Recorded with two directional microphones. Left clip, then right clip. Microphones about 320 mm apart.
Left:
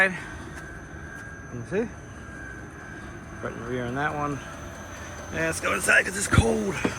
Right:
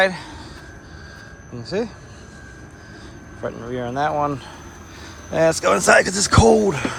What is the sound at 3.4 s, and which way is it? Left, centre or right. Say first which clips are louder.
Speech: right 5 dB; centre.